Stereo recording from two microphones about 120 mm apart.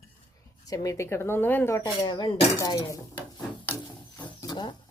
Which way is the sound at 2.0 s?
35° left (ahead or behind).